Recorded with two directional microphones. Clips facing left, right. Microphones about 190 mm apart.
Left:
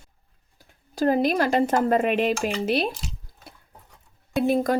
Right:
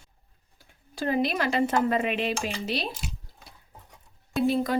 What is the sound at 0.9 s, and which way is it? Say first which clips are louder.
Speech: left 5 dB; 45° left (ahead or behind).